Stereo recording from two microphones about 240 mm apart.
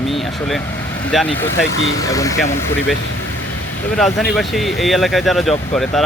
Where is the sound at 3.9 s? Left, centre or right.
Centre.